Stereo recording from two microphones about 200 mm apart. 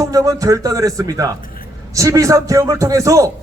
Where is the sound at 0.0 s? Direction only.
15° right (ahead or behind).